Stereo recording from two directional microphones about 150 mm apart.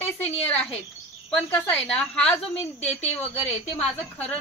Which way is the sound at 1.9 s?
5° left (ahead or behind).